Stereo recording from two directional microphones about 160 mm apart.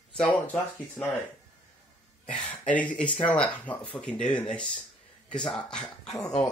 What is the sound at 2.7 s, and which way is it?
Speech, 10° left (ahead or behind).